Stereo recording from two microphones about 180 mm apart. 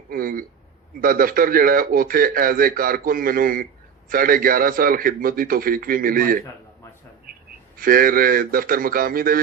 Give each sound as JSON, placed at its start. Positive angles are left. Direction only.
{"t": 0.1, "sound": "speech", "side_deg": -55}
{"t": 7.8, "sound": "speech", "side_deg": -55}